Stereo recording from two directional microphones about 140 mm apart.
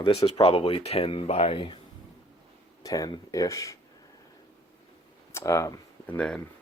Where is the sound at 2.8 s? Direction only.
25° left (ahead or behind).